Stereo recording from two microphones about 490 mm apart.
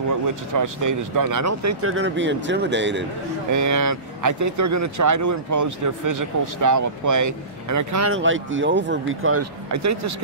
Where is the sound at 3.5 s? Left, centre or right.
Right.